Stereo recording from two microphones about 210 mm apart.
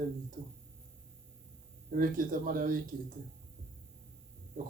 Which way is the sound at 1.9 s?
40° right (ahead or behind).